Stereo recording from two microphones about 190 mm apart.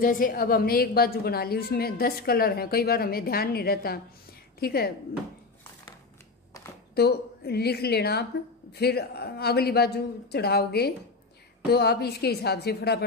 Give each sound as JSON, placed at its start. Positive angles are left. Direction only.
{"t": 0.0, "sound": "a woman's voice", "side_deg": 45}
{"t": 7.0, "sound": "a man's voice", "side_deg": 60}